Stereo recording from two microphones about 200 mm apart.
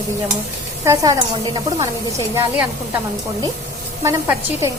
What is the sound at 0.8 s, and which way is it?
Speech, 15° right (ahead or behind).